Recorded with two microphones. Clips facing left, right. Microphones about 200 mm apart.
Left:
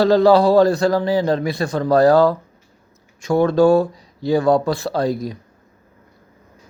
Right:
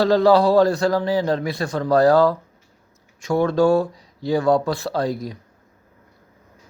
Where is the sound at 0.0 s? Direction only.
25° left (ahead or behind).